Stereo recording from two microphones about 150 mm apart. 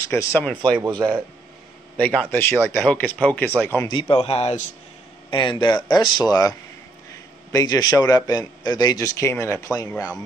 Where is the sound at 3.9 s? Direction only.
35° left (ahead or behind).